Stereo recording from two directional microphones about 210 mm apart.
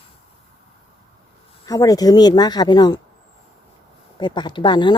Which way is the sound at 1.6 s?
15° left (ahead or behind).